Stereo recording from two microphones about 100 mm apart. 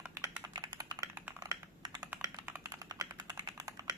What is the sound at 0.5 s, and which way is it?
Computer keyboard, 45° right (ahead or behind).